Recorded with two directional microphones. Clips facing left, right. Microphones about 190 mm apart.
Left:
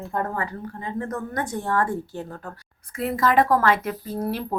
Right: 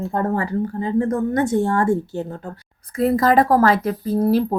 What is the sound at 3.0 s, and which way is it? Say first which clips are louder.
Speech: right 5 dB; 35° right (ahead or behind).